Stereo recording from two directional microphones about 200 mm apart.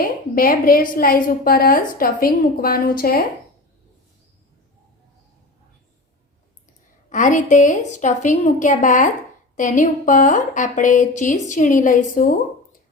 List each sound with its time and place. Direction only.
0.0 s a woman's voice: 45° left (ahead or behind)
7.1 s a woman's voice: 40° left (ahead or behind)